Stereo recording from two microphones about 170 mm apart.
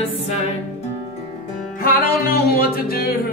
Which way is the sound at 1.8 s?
60° left (ahead or behind).